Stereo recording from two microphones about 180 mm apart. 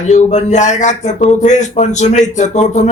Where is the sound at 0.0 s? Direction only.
40° left (ahead or behind).